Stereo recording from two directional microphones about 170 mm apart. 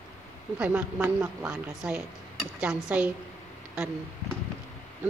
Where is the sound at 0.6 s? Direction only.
5° right (ahead or behind).